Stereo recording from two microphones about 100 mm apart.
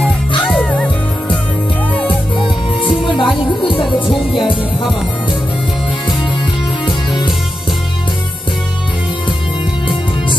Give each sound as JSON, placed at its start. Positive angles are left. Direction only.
{"t": 0.5, "sound": "music", "side_deg": 10}
{"t": 2.3, "sound": "music", "side_deg": 60}